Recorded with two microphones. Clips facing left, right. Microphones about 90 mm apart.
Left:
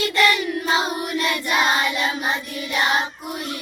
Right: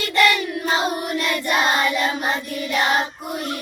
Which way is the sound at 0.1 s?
45° right (ahead or behind).